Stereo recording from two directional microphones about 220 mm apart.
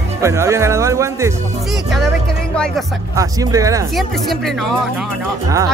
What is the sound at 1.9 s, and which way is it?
Speech, centre (ahead or behind).